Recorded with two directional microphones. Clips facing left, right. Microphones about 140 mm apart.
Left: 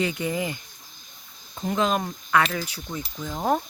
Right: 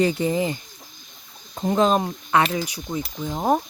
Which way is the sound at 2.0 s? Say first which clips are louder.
Right 2 dB; 25° right (ahead or behind).